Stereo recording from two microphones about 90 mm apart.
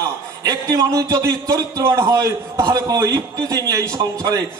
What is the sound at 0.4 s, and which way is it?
A man's voice, 45° right (ahead or behind).